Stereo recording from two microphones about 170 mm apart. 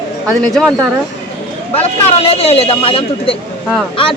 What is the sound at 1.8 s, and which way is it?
Speech, 35° left (ahead or behind).